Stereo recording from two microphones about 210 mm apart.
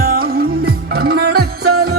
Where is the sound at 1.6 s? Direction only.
90° right.